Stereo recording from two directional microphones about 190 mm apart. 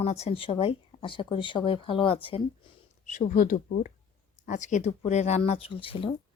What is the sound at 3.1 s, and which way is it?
Speech, 45° left (ahead or behind).